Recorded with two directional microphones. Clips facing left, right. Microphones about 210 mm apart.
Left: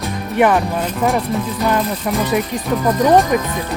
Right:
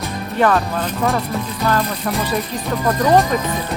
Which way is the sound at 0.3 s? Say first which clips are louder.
Left 2 dB; 15° left (ahead or behind).